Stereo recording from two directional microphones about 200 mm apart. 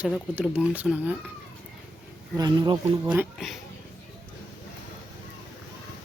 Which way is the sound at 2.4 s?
20° right (ahead or behind).